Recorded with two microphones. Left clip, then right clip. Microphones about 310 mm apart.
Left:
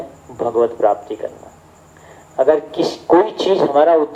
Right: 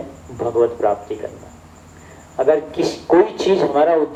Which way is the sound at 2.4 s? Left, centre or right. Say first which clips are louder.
Left 2 dB; left.